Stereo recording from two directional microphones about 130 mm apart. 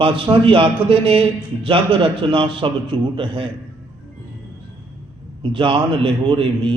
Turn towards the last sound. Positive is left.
turn(degrees=-40)  # may be behind; listen again after turning